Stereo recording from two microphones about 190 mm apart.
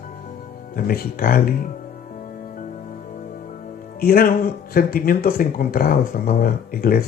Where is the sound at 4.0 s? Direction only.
50° left (ahead or behind).